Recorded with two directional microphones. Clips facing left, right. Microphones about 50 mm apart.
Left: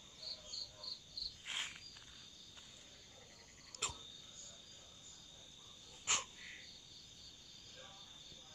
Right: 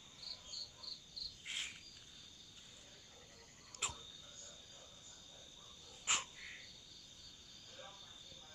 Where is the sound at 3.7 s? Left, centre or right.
Right.